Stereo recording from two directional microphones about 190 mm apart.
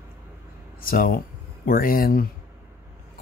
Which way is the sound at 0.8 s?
50° left (ahead or behind).